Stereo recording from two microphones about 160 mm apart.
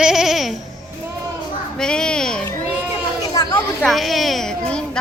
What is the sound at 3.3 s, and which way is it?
Children playing, 20° left (ahead or behind).